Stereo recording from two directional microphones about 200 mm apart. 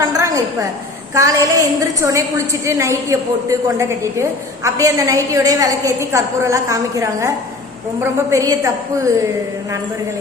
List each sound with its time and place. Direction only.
0.1 s a woman's voice: 15° right (ahead or behind)